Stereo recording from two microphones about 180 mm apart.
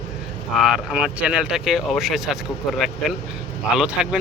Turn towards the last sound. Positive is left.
turn(degrees=-5)  # may be behind; listen again after turning